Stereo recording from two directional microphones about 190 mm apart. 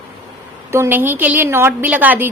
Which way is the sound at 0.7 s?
10° right (ahead or behind).